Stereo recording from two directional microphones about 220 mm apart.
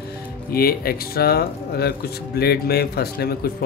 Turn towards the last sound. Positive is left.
turn(degrees=45)  # may be behind; listen again after turning